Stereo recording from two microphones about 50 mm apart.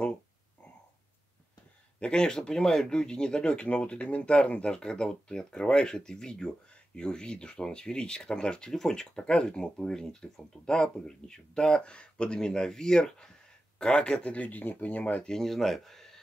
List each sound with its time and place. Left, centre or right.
2.0 s speech: centre
15.2 s speech: centre